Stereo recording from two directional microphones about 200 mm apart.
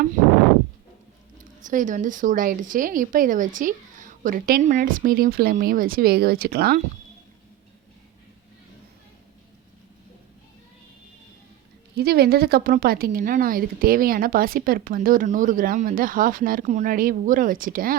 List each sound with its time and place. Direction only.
1.6 s a woman's voice: 40° right (ahead or behind)
11.9 s a woman's voice: 50° right (ahead or behind)